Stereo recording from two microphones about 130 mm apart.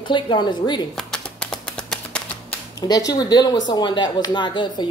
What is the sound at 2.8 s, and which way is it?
Speech, 30° left (ahead or behind).